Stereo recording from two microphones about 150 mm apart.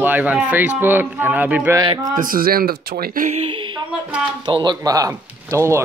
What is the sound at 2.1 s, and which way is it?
Speech, 70° right (ahead or behind).